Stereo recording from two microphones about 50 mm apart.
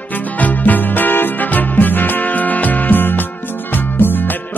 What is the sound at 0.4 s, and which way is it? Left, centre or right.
Music, left.